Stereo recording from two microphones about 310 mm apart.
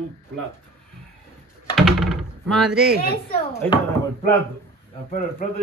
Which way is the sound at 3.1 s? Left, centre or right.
Left.